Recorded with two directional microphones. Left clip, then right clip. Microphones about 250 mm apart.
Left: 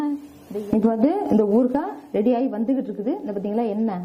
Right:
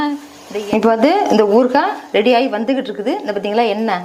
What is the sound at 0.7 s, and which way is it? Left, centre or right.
A woman's voice, centre.